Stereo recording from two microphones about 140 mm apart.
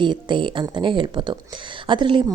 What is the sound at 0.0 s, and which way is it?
A woman's voice, 35° right (ahead or behind).